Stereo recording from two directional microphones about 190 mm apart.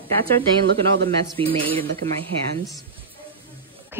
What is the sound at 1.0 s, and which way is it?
Speech, 30° right (ahead or behind).